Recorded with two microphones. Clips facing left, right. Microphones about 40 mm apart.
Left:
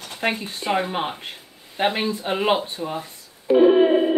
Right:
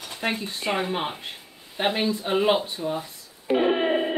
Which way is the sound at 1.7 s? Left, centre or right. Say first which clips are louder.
Left 2 dB; centre.